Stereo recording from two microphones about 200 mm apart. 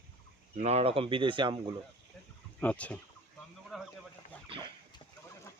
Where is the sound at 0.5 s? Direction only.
35° right (ahead or behind).